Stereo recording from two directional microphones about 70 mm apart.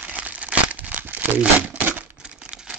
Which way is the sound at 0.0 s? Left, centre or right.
Right.